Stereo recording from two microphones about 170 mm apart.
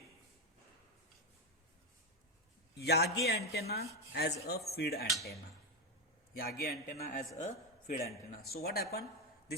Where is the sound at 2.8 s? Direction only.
70° left (ahead or behind).